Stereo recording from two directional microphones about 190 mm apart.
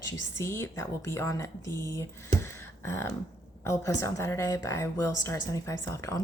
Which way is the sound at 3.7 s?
15° left (ahead or behind).